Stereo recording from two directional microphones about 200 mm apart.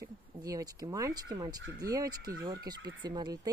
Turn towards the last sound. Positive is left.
turn(degrees=-20)  # may be behind; listen again after turning